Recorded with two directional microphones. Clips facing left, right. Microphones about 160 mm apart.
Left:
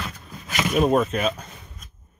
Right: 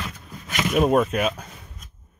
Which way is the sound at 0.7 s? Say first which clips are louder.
Right 1 dB; 5° right (ahead or behind).